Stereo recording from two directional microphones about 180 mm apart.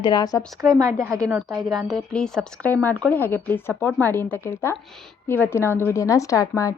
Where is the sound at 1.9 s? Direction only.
5° left (ahead or behind).